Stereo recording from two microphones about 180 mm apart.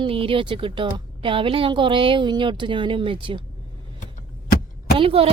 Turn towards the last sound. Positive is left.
turn(degrees=-30)  # may be behind; listen again after turning